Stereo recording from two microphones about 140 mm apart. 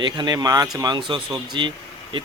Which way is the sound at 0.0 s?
30° right (ahead or behind).